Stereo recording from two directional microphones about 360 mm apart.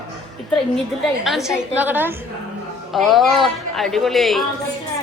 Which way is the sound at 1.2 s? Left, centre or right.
Centre.